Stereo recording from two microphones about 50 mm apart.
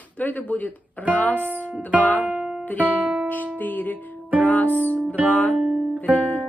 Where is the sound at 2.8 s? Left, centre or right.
Right.